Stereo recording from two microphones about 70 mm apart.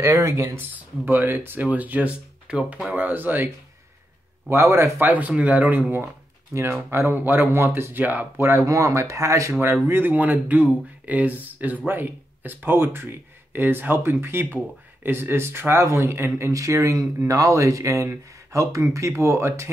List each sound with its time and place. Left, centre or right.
0.0 s speech: right
0.6 s speech: right
4.5 s speech: right
5.0 s speech: right
6.5 s speech: right
8.5 s speech: right
9.8 s speech: right